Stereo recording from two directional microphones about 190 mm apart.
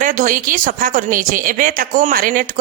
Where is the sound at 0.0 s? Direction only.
45° right (ahead or behind).